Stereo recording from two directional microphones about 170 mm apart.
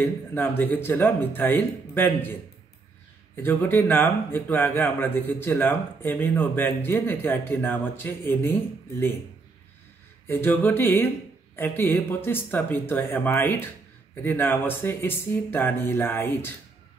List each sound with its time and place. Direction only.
0.0 s a man's voice: 10° left (ahead or behind)
3.4 s a man's voice: 10° left (ahead or behind)
10.2 s a man's voice: 10° left (ahead or behind)